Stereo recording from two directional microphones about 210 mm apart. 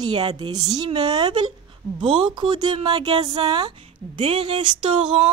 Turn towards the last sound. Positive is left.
turn(degrees=-25)  # may be behind; listen again after turning